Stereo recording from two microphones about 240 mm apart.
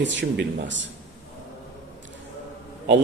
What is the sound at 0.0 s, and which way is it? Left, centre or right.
Speech, right.